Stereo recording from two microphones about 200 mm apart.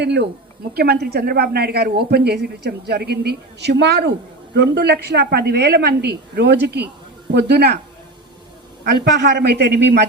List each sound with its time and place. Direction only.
0.0 s a woman's voice: 60° right (ahead or behind)
8.8 s speech: 55° right (ahead or behind)